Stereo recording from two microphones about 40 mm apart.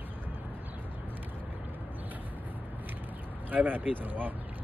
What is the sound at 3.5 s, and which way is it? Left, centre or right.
Speech, right.